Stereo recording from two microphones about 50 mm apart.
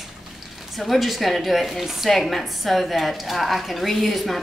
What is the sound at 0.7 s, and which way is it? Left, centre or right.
A woman's voice, centre.